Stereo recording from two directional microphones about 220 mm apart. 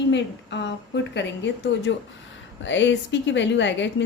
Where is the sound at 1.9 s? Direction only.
55° left (ahead or behind).